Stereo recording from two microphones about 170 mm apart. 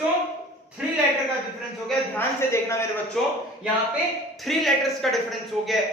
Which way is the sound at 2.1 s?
15° left (ahead or behind).